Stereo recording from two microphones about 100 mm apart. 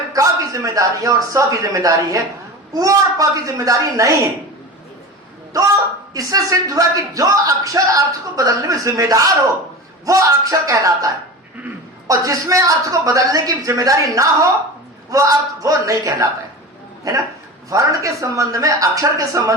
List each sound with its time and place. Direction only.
0.1 s speech: 35° right (ahead or behind)
5.5 s speech: 35° right (ahead or behind)